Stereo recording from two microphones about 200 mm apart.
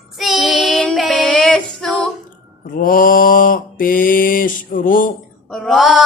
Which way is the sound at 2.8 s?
45° left (ahead or behind).